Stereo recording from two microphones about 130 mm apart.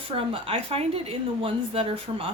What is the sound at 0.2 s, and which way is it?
A woman's voice, 45° right (ahead or behind).